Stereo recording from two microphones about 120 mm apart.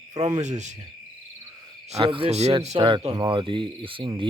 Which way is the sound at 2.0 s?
45° right (ahead or behind).